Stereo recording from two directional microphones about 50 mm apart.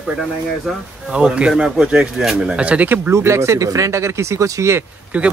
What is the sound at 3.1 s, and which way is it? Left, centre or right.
Speech, right.